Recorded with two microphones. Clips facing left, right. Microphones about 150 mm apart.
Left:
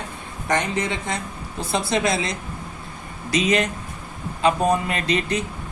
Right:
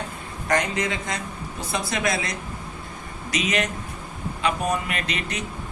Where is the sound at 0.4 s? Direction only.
25° left (ahead or behind).